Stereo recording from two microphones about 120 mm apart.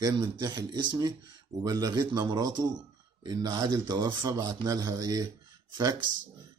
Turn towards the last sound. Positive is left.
turn(degrees=-35)  # may be behind; listen again after turning